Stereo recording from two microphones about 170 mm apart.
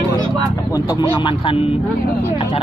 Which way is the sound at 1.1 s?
30° left (ahead or behind).